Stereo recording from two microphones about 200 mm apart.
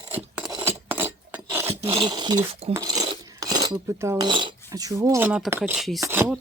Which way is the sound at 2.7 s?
20° right (ahead or behind).